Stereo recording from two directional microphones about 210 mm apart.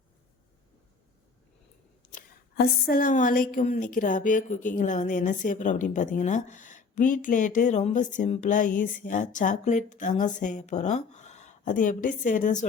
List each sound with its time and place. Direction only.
2.0 s a woman's voice: 40° left (ahead or behind)